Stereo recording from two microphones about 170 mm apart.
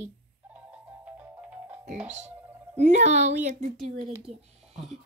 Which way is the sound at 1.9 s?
45° right (ahead or behind).